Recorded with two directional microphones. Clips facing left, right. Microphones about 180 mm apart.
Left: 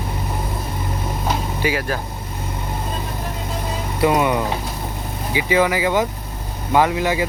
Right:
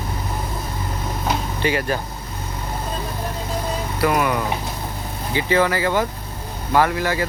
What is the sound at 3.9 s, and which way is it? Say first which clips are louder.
Speech: left 3 dB; 20° left (ahead or behind).